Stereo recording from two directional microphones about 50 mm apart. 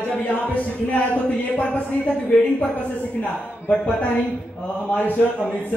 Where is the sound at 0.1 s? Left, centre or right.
Left.